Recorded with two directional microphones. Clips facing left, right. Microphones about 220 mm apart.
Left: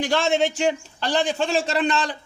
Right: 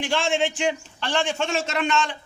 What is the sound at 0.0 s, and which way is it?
A man's voice, 40° left (ahead or behind).